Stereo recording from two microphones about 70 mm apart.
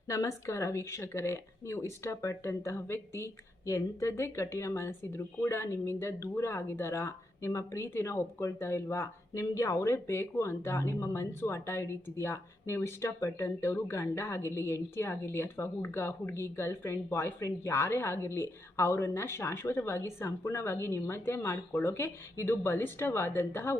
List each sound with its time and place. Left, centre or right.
0.1 s speech: left